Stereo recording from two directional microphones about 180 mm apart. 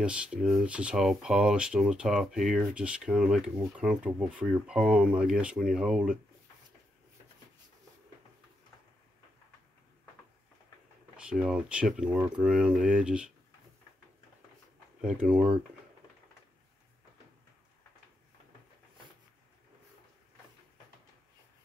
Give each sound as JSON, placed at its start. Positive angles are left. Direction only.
{"t": 0.0, "sound": "speech", "side_deg": -5}
{"t": 11.1, "sound": "speech", "side_deg": -5}
{"t": 15.0, "sound": "speech", "side_deg": -5}